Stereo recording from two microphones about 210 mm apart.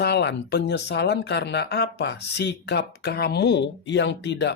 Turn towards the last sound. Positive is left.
turn(degrees=55)  # may be behind; listen again after turning